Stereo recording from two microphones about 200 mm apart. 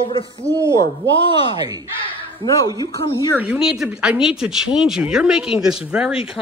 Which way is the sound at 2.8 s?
20° left (ahead or behind).